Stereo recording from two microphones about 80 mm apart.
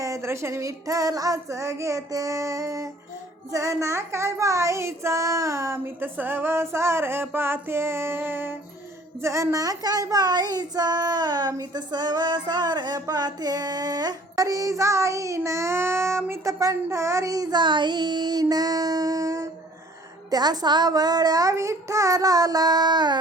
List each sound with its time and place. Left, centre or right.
0.0 s child singing: right
9.2 s child singing: right
17.6 s child singing: right
20.3 s child singing: right
21.5 s child singing: right